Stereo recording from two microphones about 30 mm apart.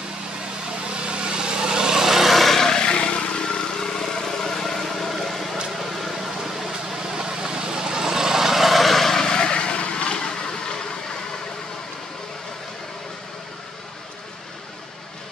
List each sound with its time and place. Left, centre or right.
1.0 s vehicle: right; by 2.3 s centre
2.3 s vehicle: centre
2.8 s vehicle: left; by 5.6 s centre
5.9 s a sound: centre
6.4 s vehicle: centre
7.2 s vehicle: right; by 9.2 s centre
9.2 s vehicle: left
10.1 s vehicle: left